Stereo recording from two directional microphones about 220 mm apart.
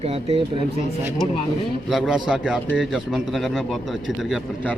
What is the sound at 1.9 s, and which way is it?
Speech, centre (ahead or behind).